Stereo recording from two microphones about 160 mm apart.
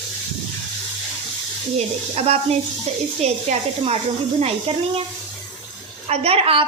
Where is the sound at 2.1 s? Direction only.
40° right (ahead or behind).